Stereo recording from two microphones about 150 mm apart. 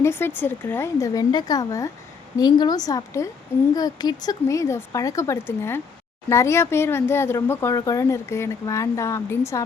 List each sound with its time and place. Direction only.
0.0 s speech: 15° left (ahead or behind)